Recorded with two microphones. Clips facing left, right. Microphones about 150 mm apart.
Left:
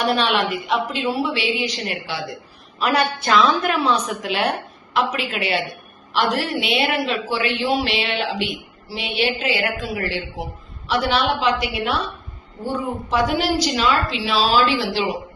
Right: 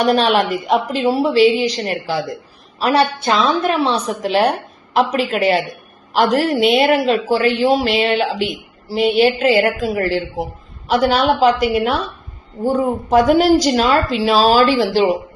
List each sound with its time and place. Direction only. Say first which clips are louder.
0.0 s a woman's voice: right 5 dB; 40° right (ahead or behind)